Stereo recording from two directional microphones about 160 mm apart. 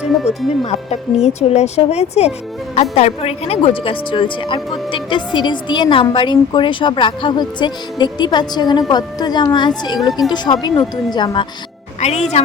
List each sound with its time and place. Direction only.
0.3 s speech: 40° left (ahead or behind)
10.1 s speech: centre (ahead or behind)
10.3 s speech: 25° left (ahead or behind)
11.9 s a woman's voice: 45° left (ahead or behind)